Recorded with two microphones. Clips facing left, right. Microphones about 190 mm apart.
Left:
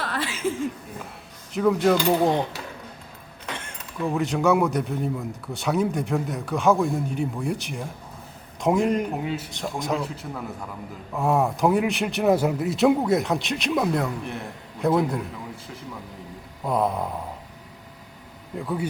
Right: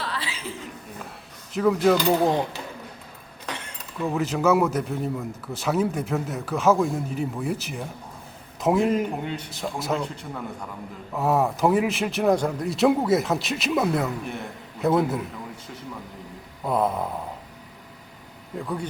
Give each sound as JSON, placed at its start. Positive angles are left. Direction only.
{"t": 0.0, "sound": "chuckle", "side_deg": 50}
{"t": 1.5, "sound": "speech", "side_deg": 0}
{"t": 4.0, "sound": "speech", "side_deg": 0}
{"t": 16.6, "sound": "speech", "side_deg": 0}
{"t": 18.5, "sound": "speech", "side_deg": 0}